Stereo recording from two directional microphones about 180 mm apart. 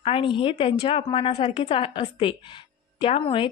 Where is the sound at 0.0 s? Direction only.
30° left (ahead or behind).